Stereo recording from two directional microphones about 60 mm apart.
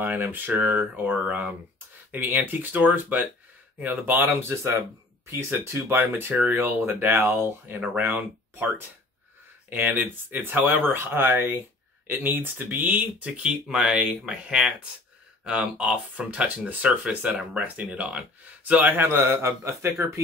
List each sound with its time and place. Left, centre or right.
0.0 s speech: right
4.4 s speech: right